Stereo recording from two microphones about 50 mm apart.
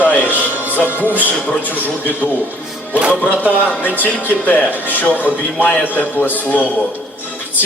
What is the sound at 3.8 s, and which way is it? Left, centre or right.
Speech, left.